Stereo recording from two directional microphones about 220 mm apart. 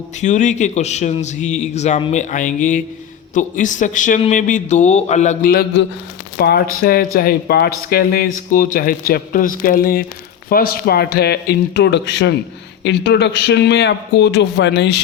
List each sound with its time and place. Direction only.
0.2 s speech: 35° left (ahead or behind); by 15.0 s 50° left (ahead or behind)